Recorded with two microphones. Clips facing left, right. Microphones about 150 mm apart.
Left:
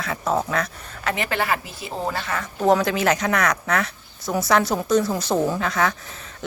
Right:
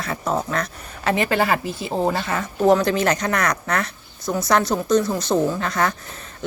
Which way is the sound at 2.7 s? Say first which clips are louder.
Right 1 dB; 5° left (ahead or behind).